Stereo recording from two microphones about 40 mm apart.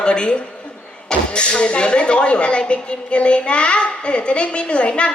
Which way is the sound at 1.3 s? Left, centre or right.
Left.